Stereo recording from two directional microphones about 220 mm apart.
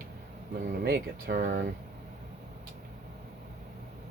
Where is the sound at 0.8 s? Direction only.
45° right (ahead or behind).